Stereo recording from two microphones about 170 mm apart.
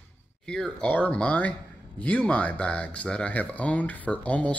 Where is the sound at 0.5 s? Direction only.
5° left (ahead or behind).